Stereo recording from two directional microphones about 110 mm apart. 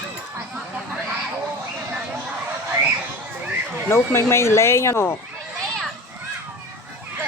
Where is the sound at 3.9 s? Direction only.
25° left (ahead or behind).